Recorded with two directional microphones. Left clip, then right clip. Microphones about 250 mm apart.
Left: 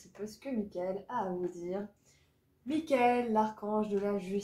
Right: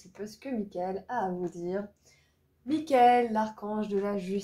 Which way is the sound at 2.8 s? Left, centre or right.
Right.